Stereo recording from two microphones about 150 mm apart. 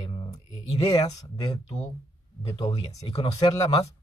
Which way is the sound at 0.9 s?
25° left (ahead or behind).